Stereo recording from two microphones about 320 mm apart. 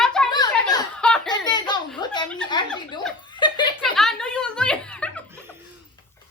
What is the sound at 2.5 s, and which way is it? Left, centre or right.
Speech, centre.